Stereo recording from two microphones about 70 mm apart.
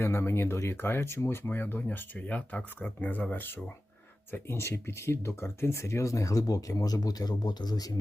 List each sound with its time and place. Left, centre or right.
0.0 s speech: left